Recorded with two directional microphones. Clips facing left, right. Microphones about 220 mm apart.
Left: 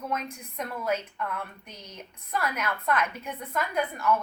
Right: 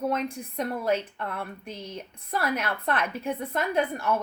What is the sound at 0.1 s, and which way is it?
A woman's voice, 30° right (ahead or behind).